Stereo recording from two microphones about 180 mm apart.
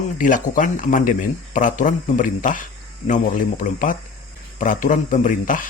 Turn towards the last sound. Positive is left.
turn(degrees=50)  # may be behind; listen again after turning